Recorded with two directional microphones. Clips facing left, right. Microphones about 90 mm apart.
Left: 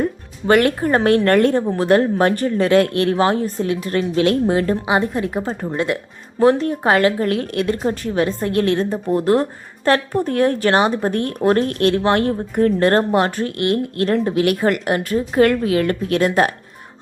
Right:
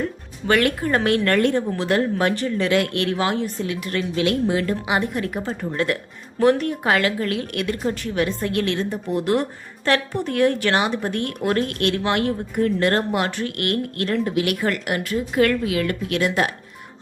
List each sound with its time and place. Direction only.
0.4 s a woman's voice: 35° left (ahead or behind)